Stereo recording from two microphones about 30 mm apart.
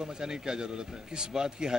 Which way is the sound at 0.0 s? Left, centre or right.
Right.